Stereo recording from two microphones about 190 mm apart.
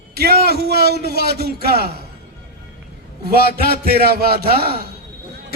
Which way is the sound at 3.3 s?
55° right (ahead or behind).